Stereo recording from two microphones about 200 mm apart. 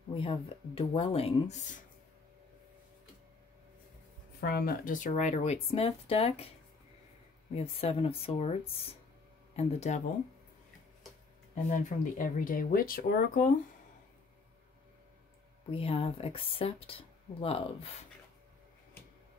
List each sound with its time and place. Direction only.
0.1 s speech: 25° left (ahead or behind)
4.4 s speech: 50° left (ahead or behind); by 6.5 s 30° left (ahead or behind)
7.5 s speech: 30° left (ahead or behind)
11.7 s speech: 40° left (ahead or behind)
15.7 s speech: 30° left (ahead or behind)